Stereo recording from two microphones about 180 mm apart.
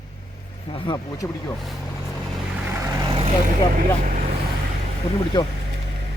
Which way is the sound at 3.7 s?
45° right (ahead or behind).